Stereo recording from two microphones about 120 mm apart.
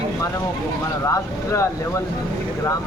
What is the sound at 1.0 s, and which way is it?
Speech, 25° left (ahead or behind).